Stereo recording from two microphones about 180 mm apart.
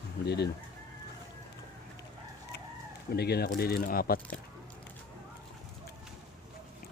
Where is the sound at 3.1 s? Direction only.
65° left (ahead or behind).